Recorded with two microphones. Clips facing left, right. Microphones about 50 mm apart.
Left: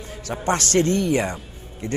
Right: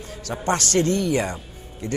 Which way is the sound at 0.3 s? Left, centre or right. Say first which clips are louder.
Left 1 dB; left.